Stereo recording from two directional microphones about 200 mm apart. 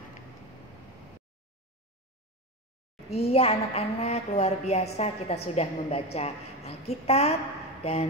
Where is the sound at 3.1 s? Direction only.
30° left (ahead or behind).